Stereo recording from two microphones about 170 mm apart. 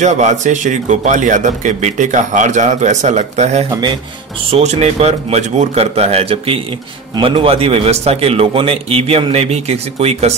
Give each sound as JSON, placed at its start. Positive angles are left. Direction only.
{"t": 0.0, "sound": "a man's voice", "side_deg": -45}